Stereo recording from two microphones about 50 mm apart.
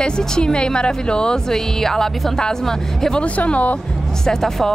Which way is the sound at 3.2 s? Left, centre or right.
Left.